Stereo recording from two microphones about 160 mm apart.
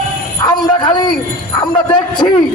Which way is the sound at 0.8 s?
30° left (ahead or behind).